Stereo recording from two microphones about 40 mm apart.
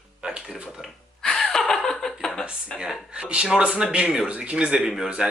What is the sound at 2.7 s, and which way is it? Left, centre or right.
Speech, left.